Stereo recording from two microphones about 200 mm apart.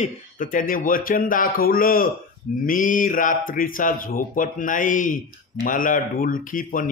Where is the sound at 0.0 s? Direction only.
45° left (ahead or behind).